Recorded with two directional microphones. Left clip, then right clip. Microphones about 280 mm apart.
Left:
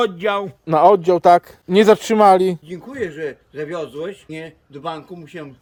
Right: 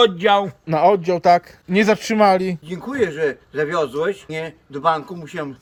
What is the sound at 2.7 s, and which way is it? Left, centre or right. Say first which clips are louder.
Speech: right 5 dB; centre.